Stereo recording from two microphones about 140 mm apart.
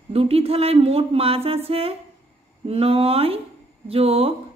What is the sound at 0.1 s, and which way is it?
Speech, 45° right (ahead or behind).